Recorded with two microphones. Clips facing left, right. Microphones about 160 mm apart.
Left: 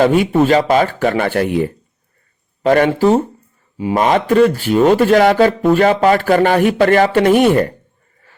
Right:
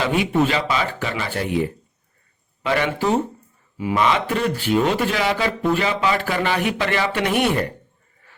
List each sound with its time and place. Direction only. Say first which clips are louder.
0.0 s speech: left 7 dB; 45° left (ahead or behind)